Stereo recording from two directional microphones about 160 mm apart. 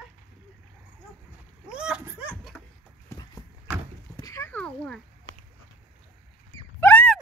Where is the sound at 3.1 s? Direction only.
25° left (ahead or behind).